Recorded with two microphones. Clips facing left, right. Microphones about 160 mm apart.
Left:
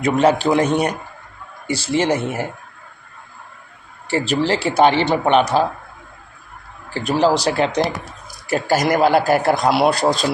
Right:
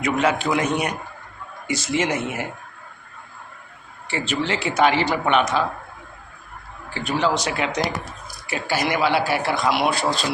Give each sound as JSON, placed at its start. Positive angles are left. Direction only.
{"t": 0.0, "sound": "a man's voice", "side_deg": 30}
{"t": 4.1, "sound": "a man's voice", "side_deg": 35}
{"t": 6.9, "sound": "a man's voice", "side_deg": 40}
{"t": 8.4, "sound": "a man's voice", "side_deg": 45}